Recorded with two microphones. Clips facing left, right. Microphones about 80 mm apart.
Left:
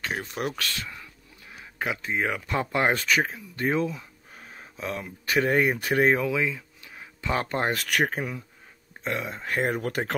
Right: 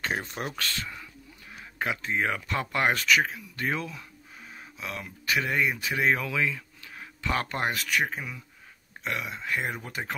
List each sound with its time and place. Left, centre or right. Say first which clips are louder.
0.1 s speech: left 2 dB; centre
1.5 s speech: left 1 dB; centre; by 6.0 s left
6.0 s speech: even; left
7.7 s speech: left 3 dB; left
9.0 s speech: left 2 dB; left
9.8 s speech: left 6 dB; left